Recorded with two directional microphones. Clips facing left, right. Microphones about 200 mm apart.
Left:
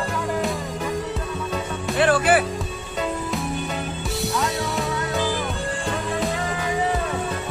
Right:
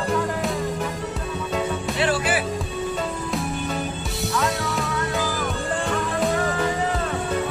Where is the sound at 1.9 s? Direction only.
55° left (ahead or behind).